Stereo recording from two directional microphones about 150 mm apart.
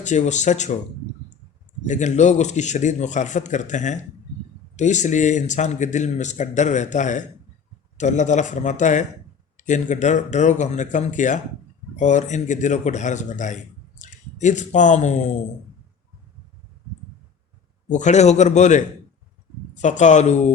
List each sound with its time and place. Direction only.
0.0 s a man's voice: 50° left (ahead or behind)
1.9 s a man's voice: 50° left (ahead or behind)
17.8 s a man's voice: 55° left (ahead or behind)